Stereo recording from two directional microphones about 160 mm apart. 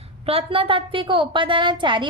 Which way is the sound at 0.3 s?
35° right (ahead or behind).